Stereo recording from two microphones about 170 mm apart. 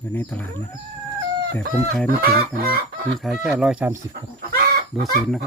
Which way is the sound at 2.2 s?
65° right (ahead or behind).